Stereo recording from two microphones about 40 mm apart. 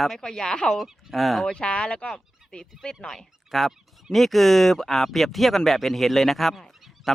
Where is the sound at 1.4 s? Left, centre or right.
Left.